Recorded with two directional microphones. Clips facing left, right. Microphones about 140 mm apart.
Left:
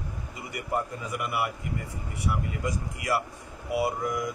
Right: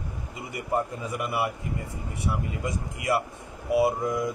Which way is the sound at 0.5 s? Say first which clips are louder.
Right 3 dB; 25° right (ahead or behind).